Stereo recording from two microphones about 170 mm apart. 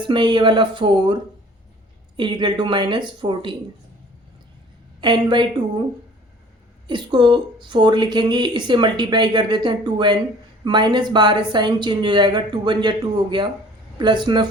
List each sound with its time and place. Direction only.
0.0 s speech: 30° right (ahead or behind)
4.9 s speech: 30° right (ahead or behind)
6.8 s speech: 25° right (ahead or behind)